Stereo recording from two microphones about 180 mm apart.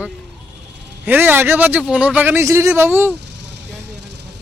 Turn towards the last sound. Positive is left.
turn(degrees=-70)  # may be behind; listen again after turning